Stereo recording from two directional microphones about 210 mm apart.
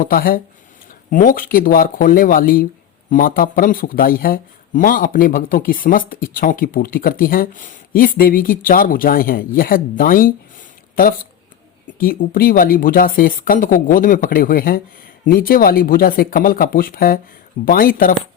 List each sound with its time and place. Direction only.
0.0 s speech: 45° left (ahead or behind)